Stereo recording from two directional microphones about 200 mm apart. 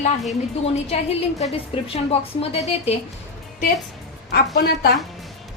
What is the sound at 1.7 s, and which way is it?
A woman's voice, 30° left (ahead or behind).